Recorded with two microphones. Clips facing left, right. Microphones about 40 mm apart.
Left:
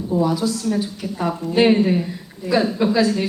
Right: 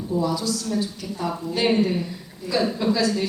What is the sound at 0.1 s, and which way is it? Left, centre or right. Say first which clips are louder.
A woman's voice: left 4 dB; left.